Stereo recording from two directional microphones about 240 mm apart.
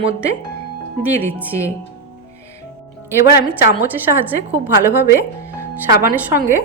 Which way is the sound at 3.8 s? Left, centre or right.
Centre.